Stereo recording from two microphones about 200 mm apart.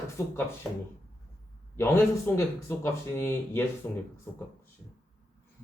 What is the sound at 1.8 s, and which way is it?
Speech, 10° left (ahead or behind).